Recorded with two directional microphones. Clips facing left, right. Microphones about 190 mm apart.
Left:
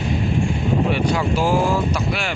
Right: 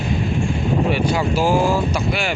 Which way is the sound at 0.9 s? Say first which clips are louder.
Right 1 dB; 5° right (ahead or behind).